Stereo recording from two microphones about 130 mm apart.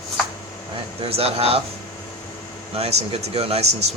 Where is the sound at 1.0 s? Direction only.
50° right (ahead or behind).